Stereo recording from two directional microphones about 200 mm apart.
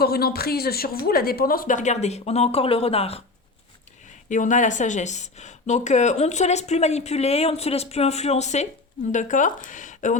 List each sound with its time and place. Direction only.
0.0 s speech: 50° left (ahead or behind); by 3.2 s 30° left (ahead or behind)
4.3 s speech: 40° left (ahead or behind)